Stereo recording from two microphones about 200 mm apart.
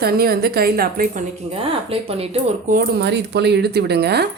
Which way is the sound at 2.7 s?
50° right (ahead or behind).